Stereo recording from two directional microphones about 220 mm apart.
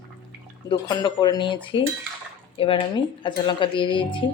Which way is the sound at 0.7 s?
20° left (ahead or behind).